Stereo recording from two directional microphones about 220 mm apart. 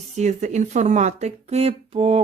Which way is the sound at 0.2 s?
30° right (ahead or behind).